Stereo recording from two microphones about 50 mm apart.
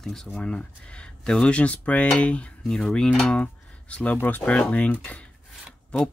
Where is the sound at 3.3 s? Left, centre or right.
Left.